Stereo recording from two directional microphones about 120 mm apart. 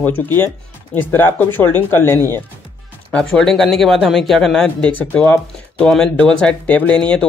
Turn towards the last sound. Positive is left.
turn(degrees=10)  # may be behind; listen again after turning